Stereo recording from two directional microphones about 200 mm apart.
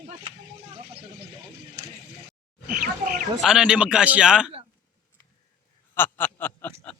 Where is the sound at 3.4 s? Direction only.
5° right (ahead or behind).